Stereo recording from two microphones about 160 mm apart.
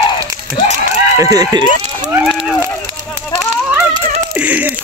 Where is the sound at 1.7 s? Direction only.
50° right (ahead or behind).